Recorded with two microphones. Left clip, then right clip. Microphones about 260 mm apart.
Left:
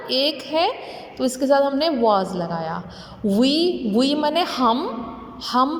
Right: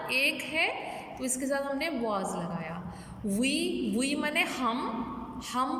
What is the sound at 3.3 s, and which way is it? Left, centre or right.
A woman's voice, centre.